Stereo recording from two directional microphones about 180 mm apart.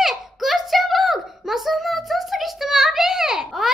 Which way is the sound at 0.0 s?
Centre (ahead or behind).